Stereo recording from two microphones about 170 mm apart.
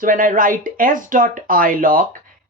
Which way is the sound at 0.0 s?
55° right (ahead or behind).